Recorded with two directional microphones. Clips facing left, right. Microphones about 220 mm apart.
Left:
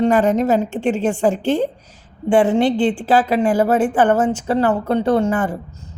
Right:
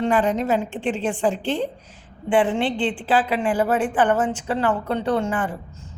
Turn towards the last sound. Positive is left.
turn(degrees=40)  # may be behind; listen again after turning